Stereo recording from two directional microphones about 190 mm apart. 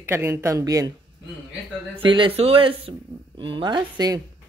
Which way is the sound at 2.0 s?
25° right (ahead or behind).